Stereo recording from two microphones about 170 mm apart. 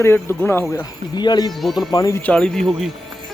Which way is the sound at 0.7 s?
25° left (ahead or behind).